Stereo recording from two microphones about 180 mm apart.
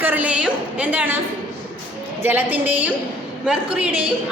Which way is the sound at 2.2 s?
10° right (ahead or behind).